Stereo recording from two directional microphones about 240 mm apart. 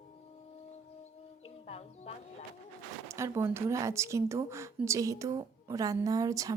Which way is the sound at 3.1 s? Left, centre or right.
Centre.